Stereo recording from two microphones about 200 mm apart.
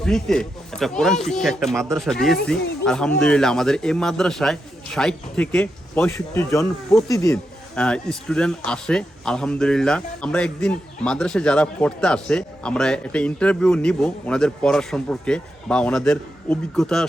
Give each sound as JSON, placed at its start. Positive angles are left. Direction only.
{"t": 0.0, "sound": "speech", "side_deg": 5}
{"t": 7.8, "sound": "speech", "side_deg": 5}